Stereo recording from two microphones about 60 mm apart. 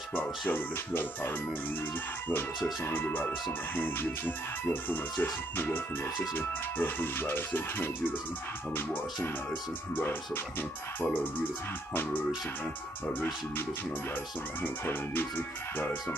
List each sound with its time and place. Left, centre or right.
0.1 s speech: left
6.3 s speech: left
9.9 s speech: left
11.9 s speech: left
14.6 s speech: left